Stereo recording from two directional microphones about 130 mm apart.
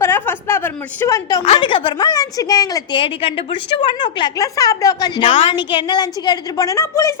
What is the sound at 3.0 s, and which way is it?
A woman's voice, 45° left (ahead or behind).